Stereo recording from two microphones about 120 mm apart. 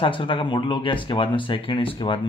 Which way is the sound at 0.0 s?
45° left (ahead or behind).